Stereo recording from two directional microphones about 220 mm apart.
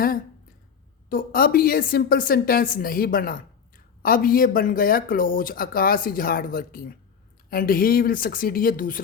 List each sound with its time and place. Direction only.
1.1 s speech: 40° left (ahead or behind)